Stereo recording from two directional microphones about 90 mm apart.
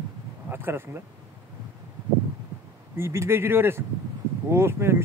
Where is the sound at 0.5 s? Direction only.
25° right (ahead or behind).